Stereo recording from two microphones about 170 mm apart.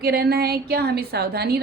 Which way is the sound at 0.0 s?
65° right (ahead or behind).